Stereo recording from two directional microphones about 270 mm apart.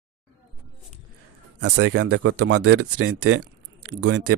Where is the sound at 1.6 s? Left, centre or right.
Right.